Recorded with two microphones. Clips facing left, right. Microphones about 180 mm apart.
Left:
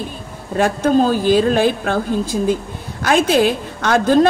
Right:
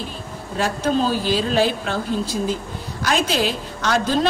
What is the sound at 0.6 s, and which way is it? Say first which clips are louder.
A woman's voice: left 6 dB; 50° left (ahead or behind).